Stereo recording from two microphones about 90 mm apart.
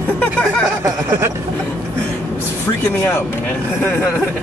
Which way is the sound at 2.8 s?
30° left (ahead or behind).